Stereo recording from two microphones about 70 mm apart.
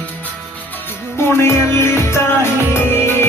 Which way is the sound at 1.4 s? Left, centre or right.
Left.